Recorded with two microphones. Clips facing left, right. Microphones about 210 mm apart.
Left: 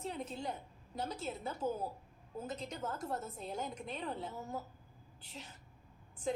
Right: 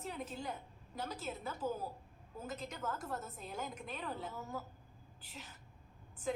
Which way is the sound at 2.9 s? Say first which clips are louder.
Left 1 dB; 25° left (ahead or behind).